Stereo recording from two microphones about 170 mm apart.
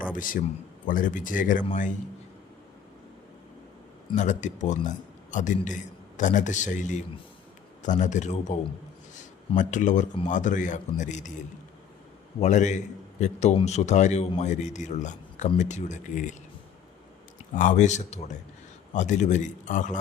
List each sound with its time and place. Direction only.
0.1 s speech: 55° left (ahead or behind)
4.1 s speech: 45° left (ahead or behind)
9.6 s speech: 45° left (ahead or behind)
12.4 s speech: 45° left (ahead or behind)
17.5 s speech: 50° left (ahead or behind)